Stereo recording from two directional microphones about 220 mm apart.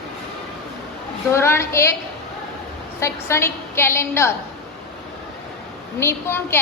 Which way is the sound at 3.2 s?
10° left (ahead or behind).